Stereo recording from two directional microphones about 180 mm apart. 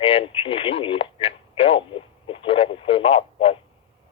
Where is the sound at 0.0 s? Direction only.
30° left (ahead or behind).